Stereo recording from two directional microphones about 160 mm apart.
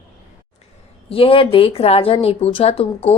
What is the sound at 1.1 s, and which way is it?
A woman's voice, 35° left (ahead or behind).